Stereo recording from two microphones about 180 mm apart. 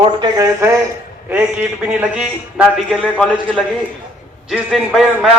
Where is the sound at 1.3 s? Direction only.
10° right (ahead or behind).